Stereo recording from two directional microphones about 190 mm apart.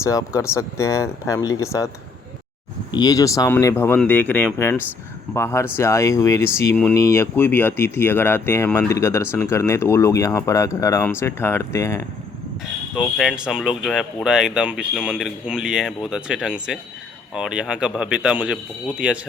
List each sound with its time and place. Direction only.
0.0 s speech: 15° left (ahead or behind)
2.9 s speech: 20° left (ahead or behind)
13.0 s speech: 5° right (ahead or behind)